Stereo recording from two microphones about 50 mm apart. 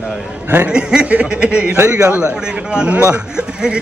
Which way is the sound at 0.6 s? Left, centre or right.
Right.